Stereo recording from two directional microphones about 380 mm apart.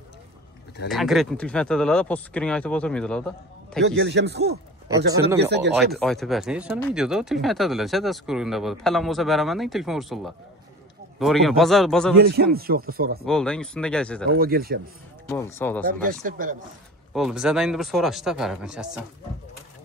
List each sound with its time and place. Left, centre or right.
0.8 s speech: centre
3.8 s speech: right
5.9 s speech: centre
12.5 s speech: right
13.2 s speech: centre
14.3 s speech: right
15.2 s speech: centre
15.8 s speech: right
17.1 s speech: centre